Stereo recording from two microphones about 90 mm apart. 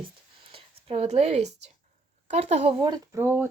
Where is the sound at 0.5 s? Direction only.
90° right.